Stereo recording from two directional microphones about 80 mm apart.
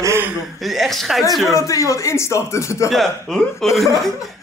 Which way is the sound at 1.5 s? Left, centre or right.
Left.